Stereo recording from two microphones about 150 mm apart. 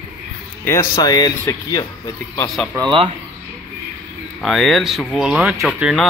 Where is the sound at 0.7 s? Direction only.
20° left (ahead or behind).